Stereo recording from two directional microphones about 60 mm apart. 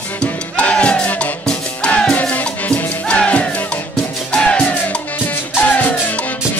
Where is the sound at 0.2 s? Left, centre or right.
Centre.